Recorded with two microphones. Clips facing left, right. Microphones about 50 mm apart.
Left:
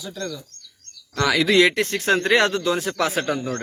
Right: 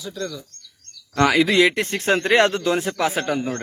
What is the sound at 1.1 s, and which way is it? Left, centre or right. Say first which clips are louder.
Speech: right 3 dB; right.